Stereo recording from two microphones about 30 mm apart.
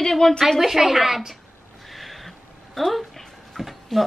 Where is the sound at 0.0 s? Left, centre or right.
Centre.